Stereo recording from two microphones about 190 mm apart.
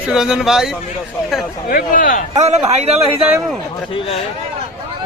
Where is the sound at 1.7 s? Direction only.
45° left (ahead or behind).